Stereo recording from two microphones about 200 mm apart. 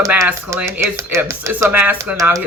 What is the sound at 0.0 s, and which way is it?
Speech, 10° right (ahead or behind).